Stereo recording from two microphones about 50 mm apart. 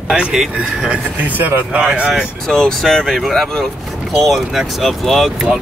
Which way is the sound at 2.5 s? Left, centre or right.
Centre.